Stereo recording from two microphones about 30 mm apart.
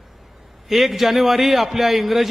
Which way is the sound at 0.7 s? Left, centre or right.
Centre.